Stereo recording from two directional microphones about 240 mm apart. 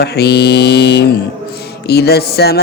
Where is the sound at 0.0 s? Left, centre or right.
Left.